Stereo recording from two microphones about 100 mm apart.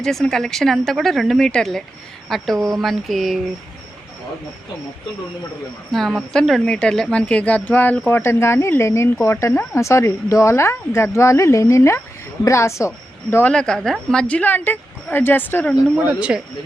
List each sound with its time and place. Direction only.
0.0 s speech: 5° left (ahead or behind)
5.9 s speech: centre (ahead or behind); by 12.9 s 30° left (ahead or behind)
13.5 s speech: 10° left (ahead or behind)
16.3 s speech: 10° right (ahead or behind)